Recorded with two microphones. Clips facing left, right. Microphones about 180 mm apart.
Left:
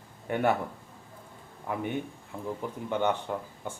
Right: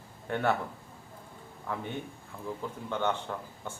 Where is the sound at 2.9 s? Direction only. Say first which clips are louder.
Left 3 dB; 15° left (ahead or behind).